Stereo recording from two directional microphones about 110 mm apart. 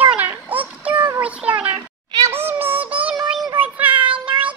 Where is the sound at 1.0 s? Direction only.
15° right (ahead or behind).